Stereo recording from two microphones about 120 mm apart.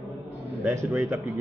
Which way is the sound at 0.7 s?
25° right (ahead or behind).